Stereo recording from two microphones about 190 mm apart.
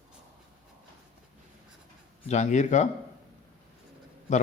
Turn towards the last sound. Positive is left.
turn(degrees=40)  # may be behind; listen again after turning